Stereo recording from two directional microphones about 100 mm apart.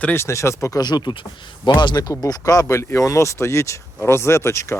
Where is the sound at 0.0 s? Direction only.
25° left (ahead or behind).